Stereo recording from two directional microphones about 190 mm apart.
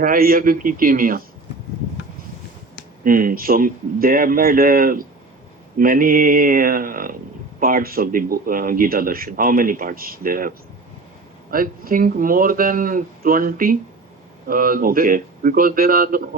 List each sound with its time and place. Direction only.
0.0 s speech: 50° right (ahead or behind)
3.0 s speech: 45° right (ahead or behind)
11.5 s speech: 50° right (ahead or behind)